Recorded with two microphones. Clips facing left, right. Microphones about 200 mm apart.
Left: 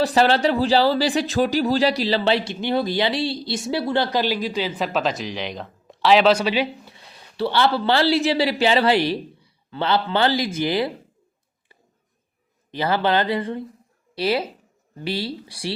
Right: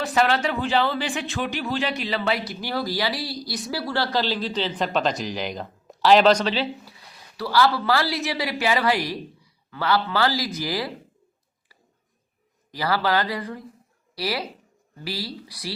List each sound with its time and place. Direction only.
0.0 s speech: 35° left (ahead or behind); by 6.7 s 10° left (ahead or behind)
6.8 s a man's voice: 25° left (ahead or behind)
12.7 s speech: 25° left (ahead or behind)